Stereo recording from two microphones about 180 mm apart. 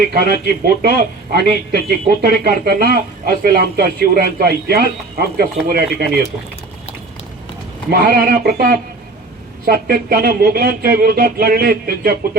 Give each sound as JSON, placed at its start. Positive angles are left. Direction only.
{"t": 0.0, "sound": "speech", "side_deg": -60}
{"t": 7.9, "sound": "speech", "side_deg": -60}